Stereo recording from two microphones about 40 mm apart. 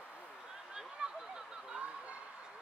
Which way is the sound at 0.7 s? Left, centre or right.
Centre.